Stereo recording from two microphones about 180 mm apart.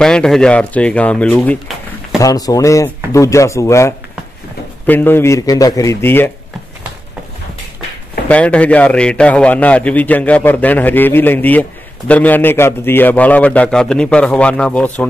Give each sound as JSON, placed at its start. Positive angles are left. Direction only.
{"t": 0.0, "sound": "speech", "side_deg": 5}
{"t": 2.2, "sound": "a man's voice", "side_deg": 20}
{"t": 8.3, "sound": "a man's voice", "side_deg": 5}